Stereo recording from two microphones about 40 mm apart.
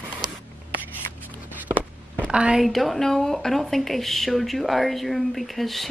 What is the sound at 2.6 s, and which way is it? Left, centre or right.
Speech, centre.